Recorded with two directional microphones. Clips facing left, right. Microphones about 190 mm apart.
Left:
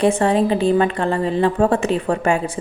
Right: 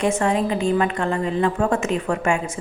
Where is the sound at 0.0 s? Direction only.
35° left (ahead or behind).